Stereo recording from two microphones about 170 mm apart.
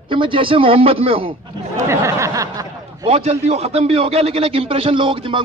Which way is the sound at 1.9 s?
15° right (ahead or behind).